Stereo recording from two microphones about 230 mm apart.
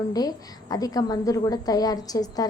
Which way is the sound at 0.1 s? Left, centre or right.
Centre.